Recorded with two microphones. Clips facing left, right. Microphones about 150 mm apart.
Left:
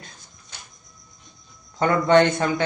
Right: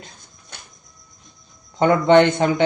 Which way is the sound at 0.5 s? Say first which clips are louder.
Right 3 dB; 55° right (ahead or behind).